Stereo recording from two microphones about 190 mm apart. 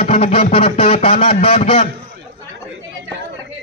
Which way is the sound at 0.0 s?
35° left (ahead or behind).